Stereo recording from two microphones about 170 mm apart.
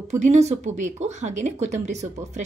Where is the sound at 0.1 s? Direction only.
40° right (ahead or behind).